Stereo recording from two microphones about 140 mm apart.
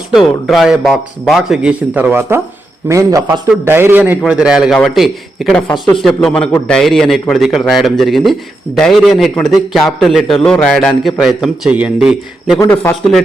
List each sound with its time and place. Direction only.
0.1 s a man's voice: centre (ahead or behind)
12.5 s speech: 15° left (ahead or behind)